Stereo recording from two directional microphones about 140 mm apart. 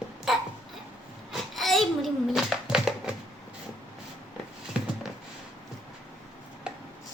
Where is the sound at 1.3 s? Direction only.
Centre (ahead or behind).